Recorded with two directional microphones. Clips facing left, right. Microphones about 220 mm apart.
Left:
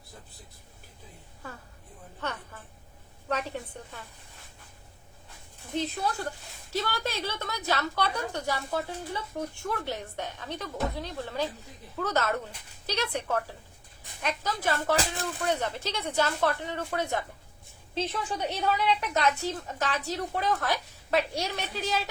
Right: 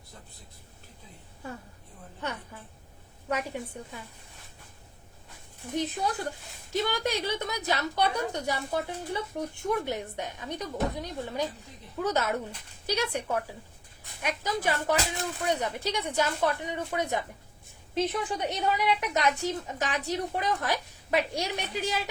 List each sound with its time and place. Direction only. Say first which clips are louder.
3.2 s a woman's voice: even; 10° right (ahead or behind)
5.7 s a woman's voice: right 1 dB; 15° right (ahead or behind)